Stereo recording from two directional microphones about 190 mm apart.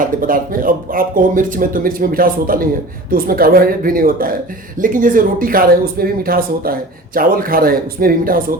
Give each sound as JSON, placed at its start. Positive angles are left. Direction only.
{"t": 0.0, "sound": "speech", "side_deg": -45}